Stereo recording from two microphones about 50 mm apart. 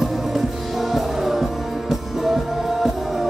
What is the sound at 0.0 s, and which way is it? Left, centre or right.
Music, centre.